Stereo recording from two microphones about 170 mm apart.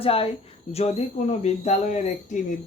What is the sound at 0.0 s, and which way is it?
Speech, 35° left (ahead or behind).